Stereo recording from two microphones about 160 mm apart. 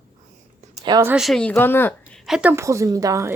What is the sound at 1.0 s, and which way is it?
Speech, 5° right (ahead or behind).